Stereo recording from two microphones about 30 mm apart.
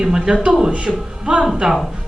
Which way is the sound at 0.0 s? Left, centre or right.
Right.